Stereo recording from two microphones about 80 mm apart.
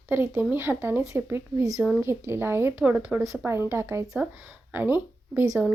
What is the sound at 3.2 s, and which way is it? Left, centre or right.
Speech, right.